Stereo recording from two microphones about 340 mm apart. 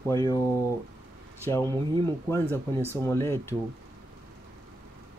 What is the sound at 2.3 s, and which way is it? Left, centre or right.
Speech, centre.